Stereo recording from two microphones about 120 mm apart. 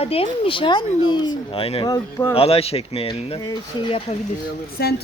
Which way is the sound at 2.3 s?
55° left (ahead or behind).